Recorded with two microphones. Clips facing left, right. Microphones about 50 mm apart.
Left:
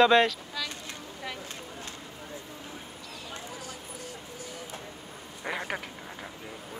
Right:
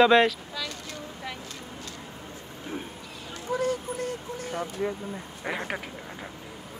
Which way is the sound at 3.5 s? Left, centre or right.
Right.